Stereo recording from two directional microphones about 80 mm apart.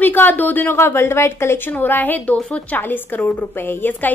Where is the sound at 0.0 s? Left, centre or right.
Left.